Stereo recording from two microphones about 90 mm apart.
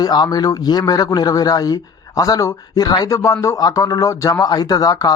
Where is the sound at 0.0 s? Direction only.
50° left (ahead or behind).